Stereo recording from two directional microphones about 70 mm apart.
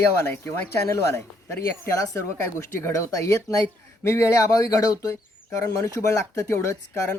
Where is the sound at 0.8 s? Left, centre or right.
Left.